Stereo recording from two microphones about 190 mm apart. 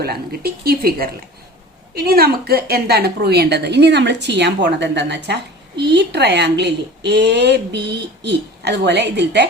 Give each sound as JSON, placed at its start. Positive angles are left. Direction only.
{"t": 0.0, "sound": "a woman's voice", "side_deg": -55}